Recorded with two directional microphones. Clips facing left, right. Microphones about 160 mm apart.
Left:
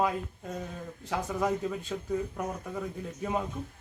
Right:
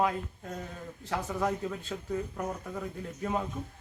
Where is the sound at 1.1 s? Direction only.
5° left (ahead or behind).